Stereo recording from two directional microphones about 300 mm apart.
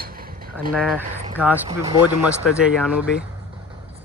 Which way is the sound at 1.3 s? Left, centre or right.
Centre.